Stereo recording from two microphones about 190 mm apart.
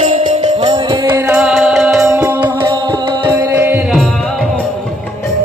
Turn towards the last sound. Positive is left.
turn(degrees=-10)  # may be behind; listen again after turning